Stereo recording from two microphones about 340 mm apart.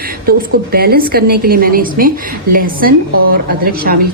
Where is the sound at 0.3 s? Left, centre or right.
Right.